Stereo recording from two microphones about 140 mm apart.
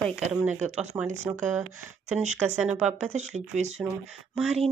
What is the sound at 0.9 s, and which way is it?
Speech, 15° right (ahead or behind).